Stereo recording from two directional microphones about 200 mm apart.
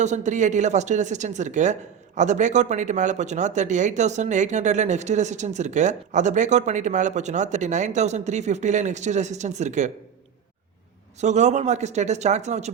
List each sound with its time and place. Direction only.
0.0 s speech: 35° right (ahead or behind)
11.2 s speech: 35° right (ahead or behind)